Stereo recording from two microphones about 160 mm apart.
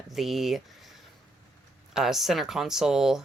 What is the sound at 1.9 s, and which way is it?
Speech, centre (ahead or behind).